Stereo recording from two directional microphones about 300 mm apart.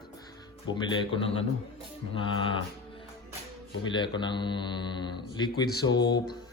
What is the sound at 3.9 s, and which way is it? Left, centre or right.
Speech, centre.